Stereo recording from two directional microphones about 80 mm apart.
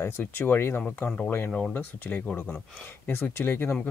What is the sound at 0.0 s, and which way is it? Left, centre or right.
Speech, left.